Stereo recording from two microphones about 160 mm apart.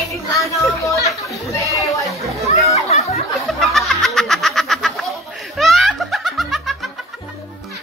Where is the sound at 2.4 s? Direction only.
40° left (ahead or behind).